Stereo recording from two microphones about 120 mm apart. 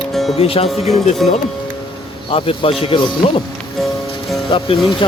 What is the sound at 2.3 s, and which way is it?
Speech, 50° left (ahead or behind).